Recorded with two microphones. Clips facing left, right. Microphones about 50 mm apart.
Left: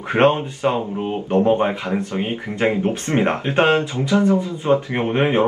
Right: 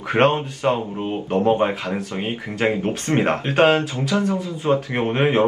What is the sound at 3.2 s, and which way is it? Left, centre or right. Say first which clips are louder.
Speech: right 1 dB; centre.